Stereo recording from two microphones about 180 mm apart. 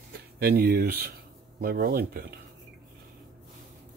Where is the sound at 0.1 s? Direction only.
60° right (ahead or behind).